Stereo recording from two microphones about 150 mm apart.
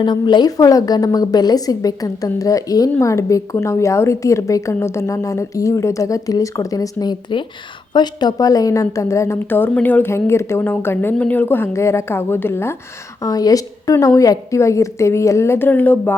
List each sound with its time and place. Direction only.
0.0 s a woman's voice: 30° left (ahead or behind); by 16.1 s 10° left (ahead or behind)